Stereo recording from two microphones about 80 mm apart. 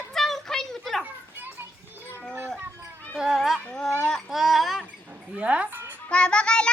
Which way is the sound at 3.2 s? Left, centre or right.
Centre.